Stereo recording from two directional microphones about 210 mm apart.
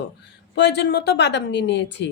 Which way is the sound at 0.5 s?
55° left (ahead or behind).